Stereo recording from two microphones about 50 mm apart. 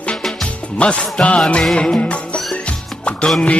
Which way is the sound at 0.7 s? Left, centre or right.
Left.